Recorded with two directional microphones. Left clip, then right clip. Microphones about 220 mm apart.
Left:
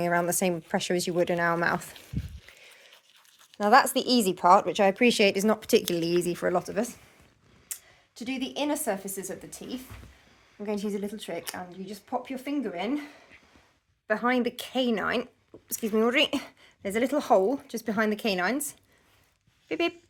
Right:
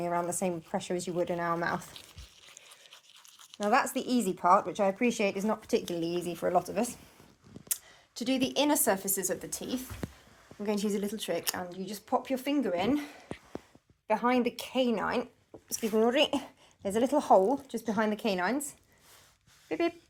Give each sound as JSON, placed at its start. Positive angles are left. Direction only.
{"t": 0.0, "sound": "speech", "side_deg": 40}
{"t": 2.5, "sound": "a sound", "side_deg": 35}
{"t": 3.6, "sound": "speech", "side_deg": 30}
{"t": 7.7, "sound": "speech", "side_deg": 0}
{"t": 14.1, "sound": "speech", "side_deg": 20}